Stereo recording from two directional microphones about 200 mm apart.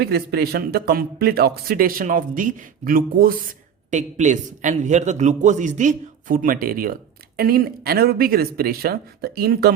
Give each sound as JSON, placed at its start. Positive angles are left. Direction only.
{"t": 0.0, "sound": "a man's voice", "side_deg": -50}